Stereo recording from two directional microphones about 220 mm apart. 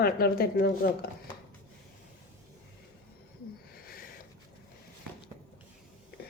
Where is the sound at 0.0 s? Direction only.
45° left (ahead or behind).